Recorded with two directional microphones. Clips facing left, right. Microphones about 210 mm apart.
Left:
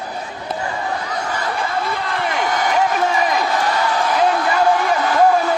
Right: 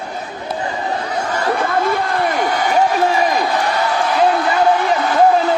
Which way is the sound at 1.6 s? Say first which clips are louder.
Right 5 dB; 55° right (ahead or behind).